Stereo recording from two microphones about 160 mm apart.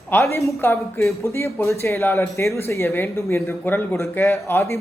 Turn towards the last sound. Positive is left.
turn(degrees=15)  # may be behind; listen again after turning